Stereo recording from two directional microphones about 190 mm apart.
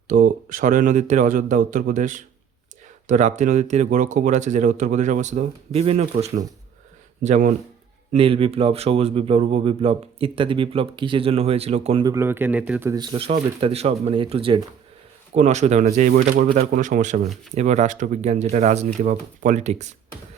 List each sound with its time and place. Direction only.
0.1 s a man's voice: 40° right (ahead or behind)
12.0 s speech: 15° right (ahead or behind)
13.0 s speech: 25° right (ahead or behind)